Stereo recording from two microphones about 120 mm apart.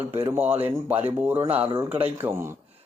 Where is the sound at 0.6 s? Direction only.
15° right (ahead or behind).